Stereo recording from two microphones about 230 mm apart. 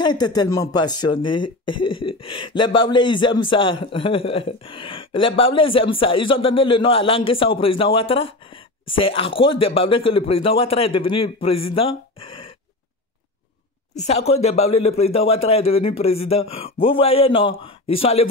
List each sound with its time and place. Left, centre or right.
0.0 s speech: centre
13.9 s speech: left